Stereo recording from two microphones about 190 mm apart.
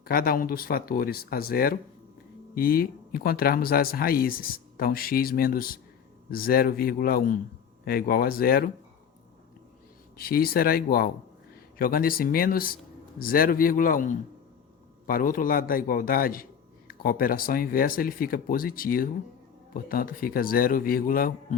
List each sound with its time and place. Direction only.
0.0 s speech: 50° left (ahead or behind)
10.2 s speech: 50° left (ahead or behind)